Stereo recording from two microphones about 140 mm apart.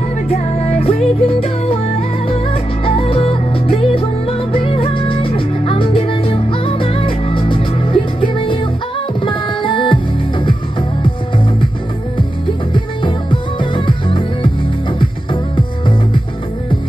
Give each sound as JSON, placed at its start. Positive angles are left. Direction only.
{"t": 0.3, "sound": "music", "side_deg": 50}
{"t": 12.7, "sound": "music", "side_deg": 35}